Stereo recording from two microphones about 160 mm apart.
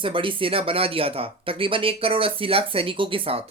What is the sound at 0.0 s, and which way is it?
Speech, 35° right (ahead or behind).